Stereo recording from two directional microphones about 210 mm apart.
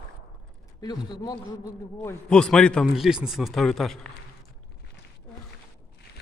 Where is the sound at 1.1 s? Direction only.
20° left (ahead or behind).